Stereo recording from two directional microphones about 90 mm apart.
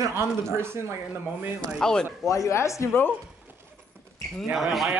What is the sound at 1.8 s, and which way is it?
Speech, 10° left (ahead or behind).